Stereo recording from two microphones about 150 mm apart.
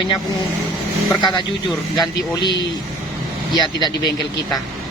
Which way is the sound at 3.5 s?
30° left (ahead or behind).